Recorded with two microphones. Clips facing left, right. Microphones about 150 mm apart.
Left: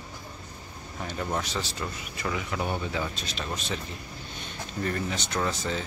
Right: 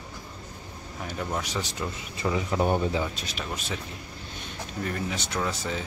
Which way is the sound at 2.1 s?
30° right (ahead or behind).